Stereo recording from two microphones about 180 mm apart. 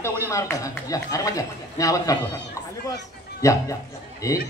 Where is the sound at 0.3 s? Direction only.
15° left (ahead or behind).